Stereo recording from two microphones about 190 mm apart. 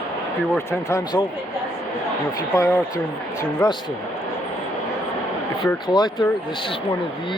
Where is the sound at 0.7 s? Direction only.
15° left (ahead or behind).